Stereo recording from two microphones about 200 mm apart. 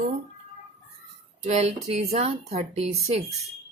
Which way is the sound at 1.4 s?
35° right (ahead or behind).